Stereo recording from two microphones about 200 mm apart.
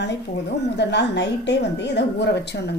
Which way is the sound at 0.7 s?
60° left (ahead or behind).